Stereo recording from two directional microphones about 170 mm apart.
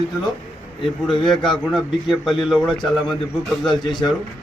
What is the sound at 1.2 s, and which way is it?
A man's voice, 5° left (ahead or behind).